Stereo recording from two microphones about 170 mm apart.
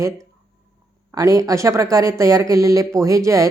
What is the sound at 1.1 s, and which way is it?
A woman's voice, 20° right (ahead or behind).